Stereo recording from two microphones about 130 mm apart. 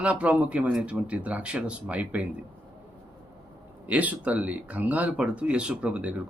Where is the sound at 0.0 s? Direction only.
10° right (ahead or behind).